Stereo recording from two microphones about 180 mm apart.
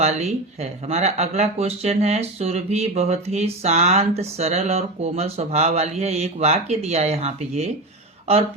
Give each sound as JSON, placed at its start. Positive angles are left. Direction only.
{"t": 0.0, "sound": "speech", "side_deg": -35}